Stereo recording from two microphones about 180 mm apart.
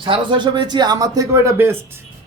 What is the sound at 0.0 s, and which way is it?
Speech, 25° right (ahead or behind).